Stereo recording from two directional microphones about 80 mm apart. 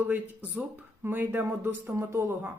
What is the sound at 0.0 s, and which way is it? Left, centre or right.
A woman's voice, right.